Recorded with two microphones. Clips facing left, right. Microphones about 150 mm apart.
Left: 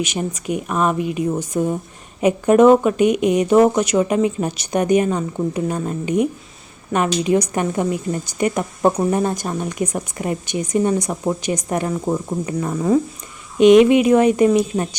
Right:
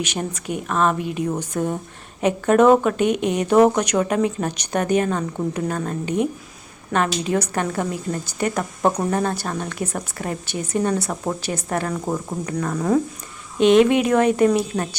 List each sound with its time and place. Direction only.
0.0 s a woman's voice: 10° left (ahead or behind)